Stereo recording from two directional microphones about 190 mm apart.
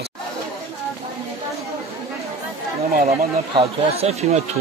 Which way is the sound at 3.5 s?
35° right (ahead or behind).